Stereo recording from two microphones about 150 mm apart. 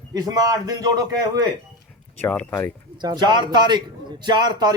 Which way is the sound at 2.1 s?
10° left (ahead or behind).